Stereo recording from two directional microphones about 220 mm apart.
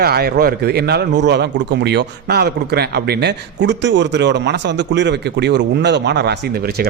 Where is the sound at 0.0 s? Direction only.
45° right (ahead or behind).